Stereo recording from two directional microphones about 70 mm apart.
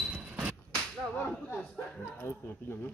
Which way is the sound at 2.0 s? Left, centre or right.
Left.